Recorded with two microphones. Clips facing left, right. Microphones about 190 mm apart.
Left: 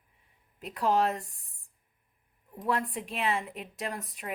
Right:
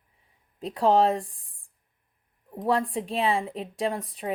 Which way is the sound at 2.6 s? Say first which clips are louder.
Right 6 dB; 30° right (ahead or behind).